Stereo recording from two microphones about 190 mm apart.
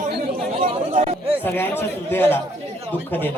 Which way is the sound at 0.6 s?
35° right (ahead or behind).